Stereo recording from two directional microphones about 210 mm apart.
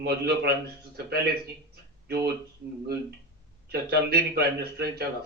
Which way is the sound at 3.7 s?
50° right (ahead or behind).